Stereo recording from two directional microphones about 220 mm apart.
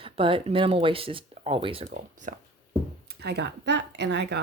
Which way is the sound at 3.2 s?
50° right (ahead or behind).